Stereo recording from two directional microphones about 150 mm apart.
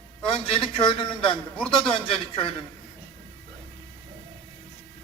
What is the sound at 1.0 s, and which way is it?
Speech, 35° left (ahead or behind).